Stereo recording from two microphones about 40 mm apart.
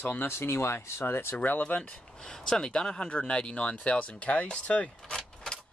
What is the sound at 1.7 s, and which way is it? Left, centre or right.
Speech, left.